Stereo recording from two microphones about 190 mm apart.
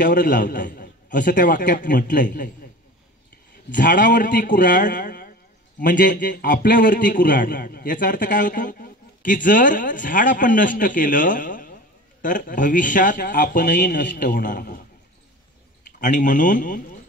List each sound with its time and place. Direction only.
0.0 s a man's voice: 45° left (ahead or behind)
3.7 s a man's voice: 45° left (ahead or behind)
16.0 s a man's voice: 40° left (ahead or behind)